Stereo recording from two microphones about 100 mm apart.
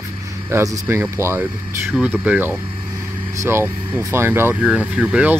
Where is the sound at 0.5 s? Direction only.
25° right (ahead or behind).